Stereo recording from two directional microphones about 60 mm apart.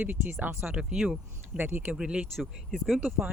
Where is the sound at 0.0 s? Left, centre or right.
Right.